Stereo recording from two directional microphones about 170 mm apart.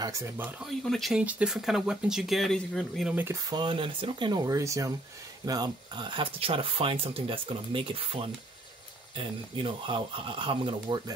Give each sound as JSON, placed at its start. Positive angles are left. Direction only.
{"t": 0.0, "sound": "speech", "side_deg": -15}
{"t": 0.6, "sound": "speech", "side_deg": 0}
{"t": 3.4, "sound": "speech", "side_deg": -25}